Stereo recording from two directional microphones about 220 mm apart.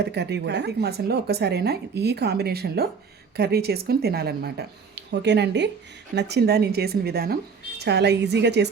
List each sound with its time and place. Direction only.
0.0 s speech: 50° right (ahead or behind)